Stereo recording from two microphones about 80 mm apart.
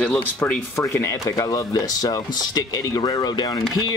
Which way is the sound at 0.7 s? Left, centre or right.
Left.